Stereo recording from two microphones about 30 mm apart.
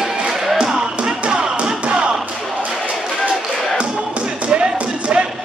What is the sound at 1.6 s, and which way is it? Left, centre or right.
Tap, right.